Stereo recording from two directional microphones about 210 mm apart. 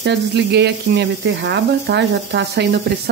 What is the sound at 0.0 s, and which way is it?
Speech, 55° right (ahead or behind).